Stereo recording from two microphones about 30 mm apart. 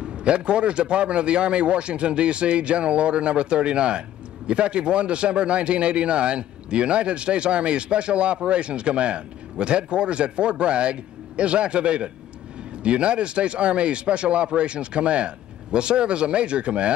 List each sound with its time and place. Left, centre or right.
0.0 s speech: right